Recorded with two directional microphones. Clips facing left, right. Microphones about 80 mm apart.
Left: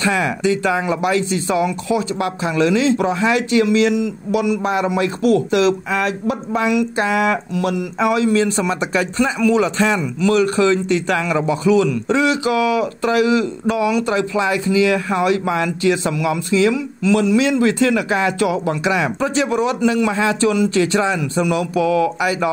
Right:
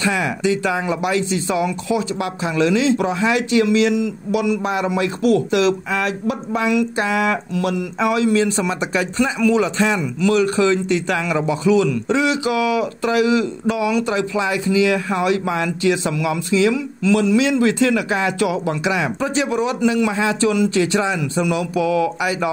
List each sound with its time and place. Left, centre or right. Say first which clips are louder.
0.0 s a man's voice: left 2 dB; left
8.3 s speech: left 1 dB; left
16.7 s speech: left 1 dB; left
17.4 s speech: left 1 dB; left
19.1 s speech: left 2 dB; left